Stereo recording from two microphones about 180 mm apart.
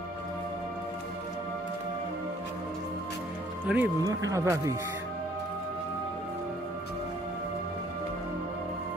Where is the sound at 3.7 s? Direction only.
5° right (ahead or behind).